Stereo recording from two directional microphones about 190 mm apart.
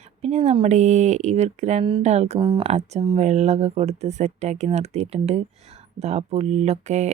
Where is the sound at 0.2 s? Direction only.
35° right (ahead or behind).